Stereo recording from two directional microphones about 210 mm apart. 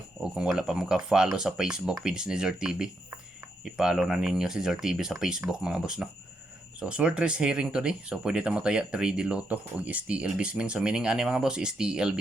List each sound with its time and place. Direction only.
0.2 s speech: 5° right (ahead or behind)